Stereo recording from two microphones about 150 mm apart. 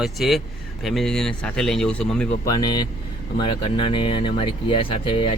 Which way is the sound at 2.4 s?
25° left (ahead or behind).